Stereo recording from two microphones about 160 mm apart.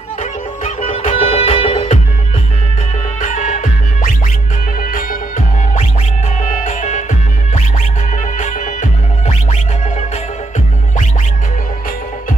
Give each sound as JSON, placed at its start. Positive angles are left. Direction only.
{"t": 0.7, "sound": "music", "side_deg": 40}
{"t": 3.2, "sound": "music", "side_deg": 50}
{"t": 6.4, "sound": "music", "side_deg": 50}